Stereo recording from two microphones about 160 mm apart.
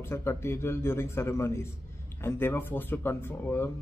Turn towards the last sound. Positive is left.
turn(degrees=15)  # may be behind; listen again after turning